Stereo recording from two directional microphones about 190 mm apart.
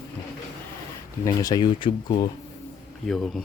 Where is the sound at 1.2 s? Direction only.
20° left (ahead or behind).